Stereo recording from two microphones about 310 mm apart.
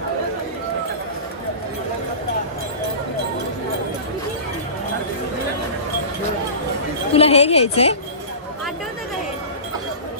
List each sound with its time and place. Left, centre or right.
7.1 s speech: centre